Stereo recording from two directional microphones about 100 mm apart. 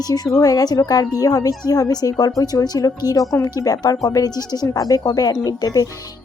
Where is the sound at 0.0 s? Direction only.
40° left (ahead or behind).